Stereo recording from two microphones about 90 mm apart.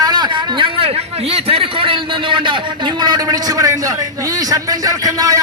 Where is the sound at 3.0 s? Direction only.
50° right (ahead or behind).